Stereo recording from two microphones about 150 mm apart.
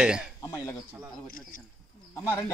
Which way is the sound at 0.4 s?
20° left (ahead or behind).